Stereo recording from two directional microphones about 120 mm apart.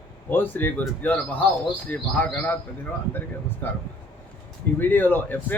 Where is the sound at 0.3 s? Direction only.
15° left (ahead or behind).